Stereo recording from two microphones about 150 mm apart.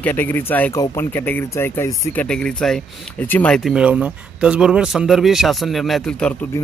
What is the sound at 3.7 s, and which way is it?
Speech, 5° right (ahead or behind).